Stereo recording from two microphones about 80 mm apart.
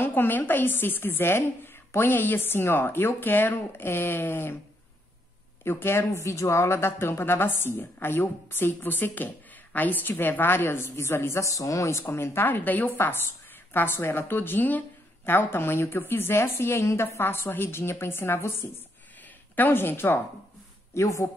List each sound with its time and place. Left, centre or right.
0.0 s speech: left
5.6 s a woman's voice: left
20.9 s a woman's voice: left